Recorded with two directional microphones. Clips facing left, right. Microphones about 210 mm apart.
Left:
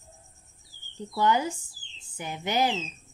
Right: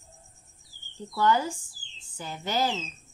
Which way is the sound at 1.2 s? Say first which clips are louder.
Even; 20° left (ahead or behind).